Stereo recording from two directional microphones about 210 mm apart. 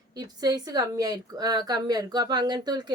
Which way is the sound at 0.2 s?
20° right (ahead or behind).